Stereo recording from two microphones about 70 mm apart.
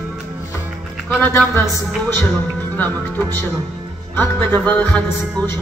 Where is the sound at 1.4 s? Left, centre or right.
Centre.